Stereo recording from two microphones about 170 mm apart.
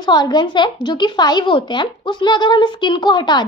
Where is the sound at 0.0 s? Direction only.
25° left (ahead or behind).